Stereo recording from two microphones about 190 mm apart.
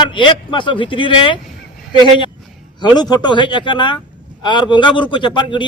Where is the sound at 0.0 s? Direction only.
25° left (ahead or behind).